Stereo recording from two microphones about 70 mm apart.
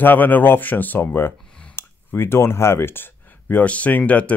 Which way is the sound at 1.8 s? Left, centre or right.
Left.